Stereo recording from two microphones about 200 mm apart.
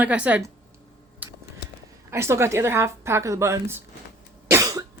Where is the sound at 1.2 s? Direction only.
10° right (ahead or behind).